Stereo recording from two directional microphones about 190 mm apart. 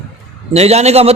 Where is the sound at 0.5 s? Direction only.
35° right (ahead or behind).